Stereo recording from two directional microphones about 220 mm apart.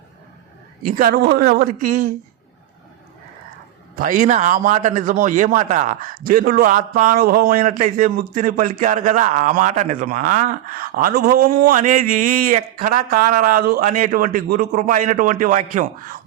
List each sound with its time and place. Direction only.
0.9 s a man's voice: 40° right (ahead or behind)
3.9 s a man's voice: 35° right (ahead or behind)